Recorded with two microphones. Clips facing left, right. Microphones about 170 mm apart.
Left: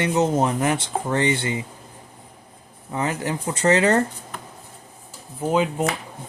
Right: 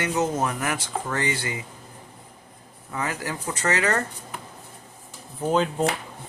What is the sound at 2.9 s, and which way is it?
Speech, 25° left (ahead or behind).